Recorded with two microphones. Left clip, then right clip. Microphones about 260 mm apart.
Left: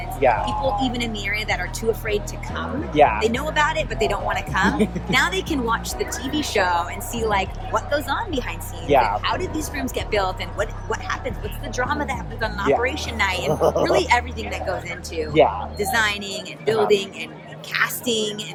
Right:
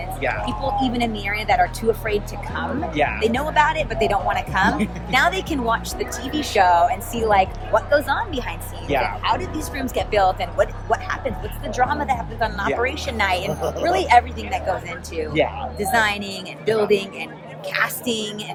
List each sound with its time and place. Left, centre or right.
0.4 s speech: centre
2.9 s speech: centre
3.2 s speech: centre
8.9 s speech: centre
9.2 s speech: centre
13.5 s speech: centre
13.8 s speech: centre
15.3 s speech: centre
15.8 s speech: centre